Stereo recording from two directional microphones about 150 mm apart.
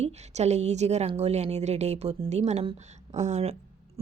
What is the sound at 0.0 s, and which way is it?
Speech, 50° right (ahead or behind).